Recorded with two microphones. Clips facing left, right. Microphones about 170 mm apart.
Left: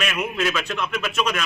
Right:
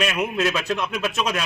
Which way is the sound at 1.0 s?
35° right (ahead or behind).